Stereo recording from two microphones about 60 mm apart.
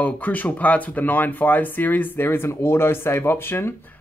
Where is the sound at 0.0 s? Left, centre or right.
Left.